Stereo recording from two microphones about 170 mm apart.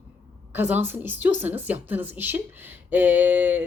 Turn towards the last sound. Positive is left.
turn(degrees=-10)  # may be behind; listen again after turning